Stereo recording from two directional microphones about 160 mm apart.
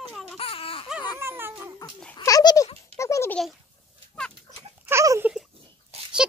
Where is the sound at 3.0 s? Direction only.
15° left (ahead or behind).